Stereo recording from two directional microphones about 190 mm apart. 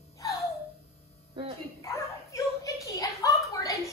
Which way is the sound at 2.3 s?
15° left (ahead or behind).